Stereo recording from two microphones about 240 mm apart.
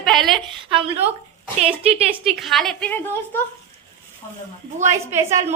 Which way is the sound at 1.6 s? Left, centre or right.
Right.